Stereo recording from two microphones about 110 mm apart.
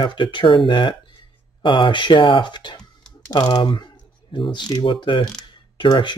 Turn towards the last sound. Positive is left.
turn(degrees=45)  # may be behind; listen again after turning